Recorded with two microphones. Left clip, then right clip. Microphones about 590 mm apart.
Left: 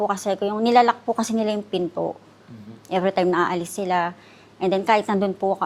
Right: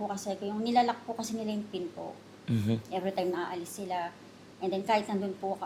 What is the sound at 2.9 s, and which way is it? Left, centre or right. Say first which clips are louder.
A woman's voice: left 14 dB; left.